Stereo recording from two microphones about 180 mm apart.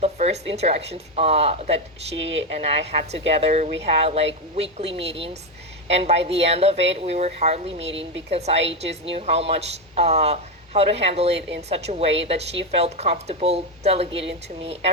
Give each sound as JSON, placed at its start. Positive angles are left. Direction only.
{"t": 0.0, "sound": "a man's voice", "side_deg": -35}
{"t": 2.1, "sound": "a woman's voice", "side_deg": -90}
{"t": 2.6, "sound": "a man's voice", "side_deg": -35}
{"t": 7.9, "sound": "a woman's voice", "side_deg": -90}
{"t": 8.3, "sound": "a man's voice", "side_deg": -35}
{"t": 11.3, "sound": "speech", "side_deg": -80}
{"t": 11.7, "sound": "a man's voice", "side_deg": -35}